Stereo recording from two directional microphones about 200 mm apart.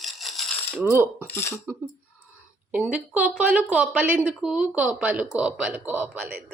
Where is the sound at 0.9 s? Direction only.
10° right (ahead or behind).